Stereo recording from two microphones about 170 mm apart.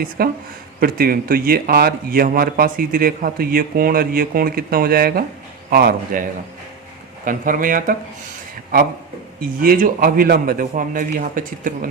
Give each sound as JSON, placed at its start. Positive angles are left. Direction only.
{"t": 0.2, "sound": "speech", "side_deg": -60}
{"t": 7.3, "sound": "speech", "side_deg": -55}
{"t": 9.4, "sound": "speech", "side_deg": -55}